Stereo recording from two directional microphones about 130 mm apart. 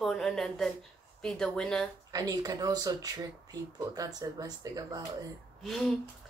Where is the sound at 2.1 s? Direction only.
30° right (ahead or behind).